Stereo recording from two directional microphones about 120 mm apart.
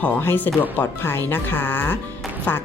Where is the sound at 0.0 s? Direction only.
15° left (ahead or behind).